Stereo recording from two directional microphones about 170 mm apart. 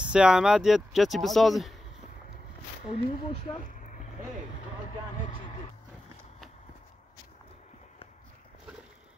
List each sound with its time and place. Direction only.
0.0 s speech: 5° right (ahead or behind)
2.9 s speech: 40° left (ahead or behind)